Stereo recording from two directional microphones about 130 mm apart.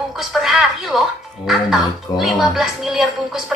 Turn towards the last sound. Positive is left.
turn(degrees=0)  # may be behind; listen again after turning